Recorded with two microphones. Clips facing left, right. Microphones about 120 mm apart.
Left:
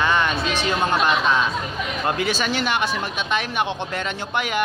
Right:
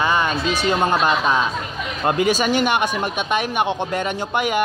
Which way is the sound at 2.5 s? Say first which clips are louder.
Right 5 dB; 15° right (ahead or behind).